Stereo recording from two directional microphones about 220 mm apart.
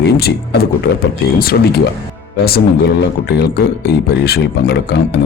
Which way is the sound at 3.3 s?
45° left (ahead or behind).